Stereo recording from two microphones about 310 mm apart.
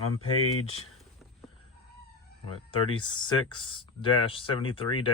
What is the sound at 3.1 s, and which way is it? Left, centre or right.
Speech, centre.